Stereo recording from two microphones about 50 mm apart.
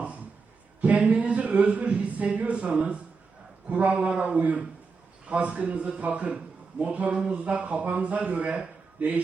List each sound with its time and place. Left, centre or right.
0.8 s speech: right